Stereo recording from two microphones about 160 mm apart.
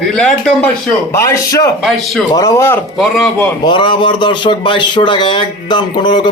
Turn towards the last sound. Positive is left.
turn(degrees=30)  # may be behind; listen again after turning